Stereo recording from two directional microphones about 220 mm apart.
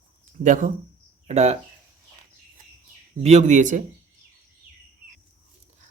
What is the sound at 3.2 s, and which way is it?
Speech, 30° right (ahead or behind).